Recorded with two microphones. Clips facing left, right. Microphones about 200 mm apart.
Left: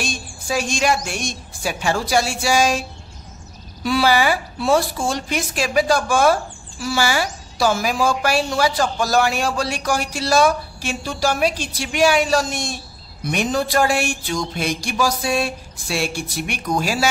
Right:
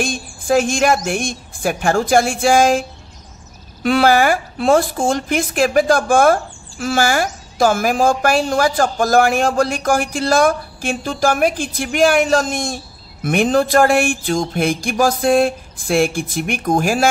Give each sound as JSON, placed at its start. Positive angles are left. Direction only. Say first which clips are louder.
{"t": 0.0, "sound": "a woman's voice", "louder": "right 6 dB", "side_deg": -50}
{"t": 3.8, "sound": "a woman's voice", "louder": "right 4 dB", "side_deg": -55}